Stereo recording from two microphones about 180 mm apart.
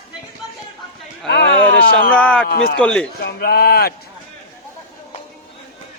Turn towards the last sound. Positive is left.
turn(degrees=60)  # may be behind; listen again after turning